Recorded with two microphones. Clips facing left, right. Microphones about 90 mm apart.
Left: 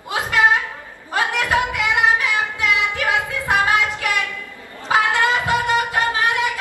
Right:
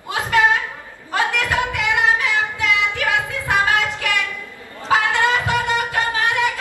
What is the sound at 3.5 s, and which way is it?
Music, 20° left (ahead or behind).